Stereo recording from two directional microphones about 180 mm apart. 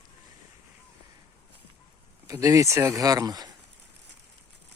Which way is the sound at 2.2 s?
20° right (ahead or behind).